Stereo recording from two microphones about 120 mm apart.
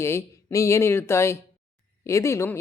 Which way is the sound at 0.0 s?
20° left (ahead or behind).